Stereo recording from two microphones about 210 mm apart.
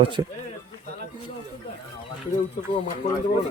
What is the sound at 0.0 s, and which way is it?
Speech, 20° right (ahead or behind).